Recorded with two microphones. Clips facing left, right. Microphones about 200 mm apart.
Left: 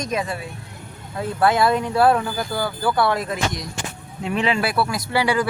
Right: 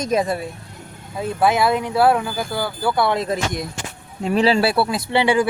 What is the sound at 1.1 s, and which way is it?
Speech, 15° right (ahead or behind).